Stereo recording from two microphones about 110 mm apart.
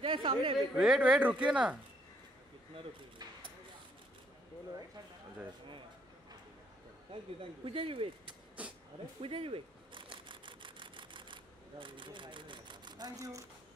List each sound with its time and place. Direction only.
0.0 s speech: 50° right (ahead or behind)
0.7 s speech: 5° right (ahead or behind)
7.6 s speech: 55° right (ahead or behind)
8.6 s a sound: 10° right (ahead or behind)
9.2 s camera: 55° right (ahead or behind)
11.8 s speech: 50° right (ahead or behind); by 13.5 s 30° right (ahead or behind)